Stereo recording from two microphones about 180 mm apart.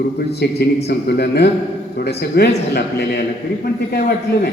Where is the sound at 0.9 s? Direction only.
65° left (ahead or behind).